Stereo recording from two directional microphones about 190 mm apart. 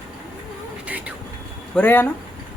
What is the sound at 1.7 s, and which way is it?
Speech, 10° left (ahead or behind).